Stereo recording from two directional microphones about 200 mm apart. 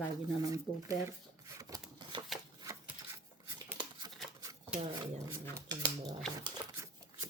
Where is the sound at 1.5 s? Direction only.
20° right (ahead or behind).